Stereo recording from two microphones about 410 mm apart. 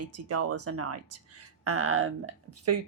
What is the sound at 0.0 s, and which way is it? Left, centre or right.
Speech, right.